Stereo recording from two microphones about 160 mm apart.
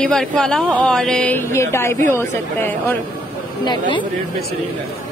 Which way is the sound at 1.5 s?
15° left (ahead or behind).